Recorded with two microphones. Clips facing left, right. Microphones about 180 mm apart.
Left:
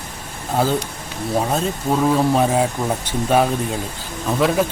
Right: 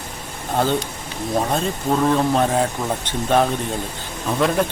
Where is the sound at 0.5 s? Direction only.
5° left (ahead or behind).